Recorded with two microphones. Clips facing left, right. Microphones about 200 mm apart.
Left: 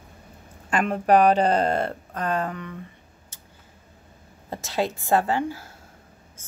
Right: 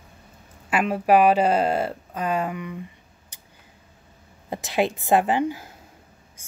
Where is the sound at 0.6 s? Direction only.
5° right (ahead or behind).